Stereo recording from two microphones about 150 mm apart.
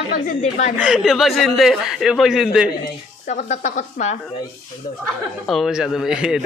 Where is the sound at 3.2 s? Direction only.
55° left (ahead or behind).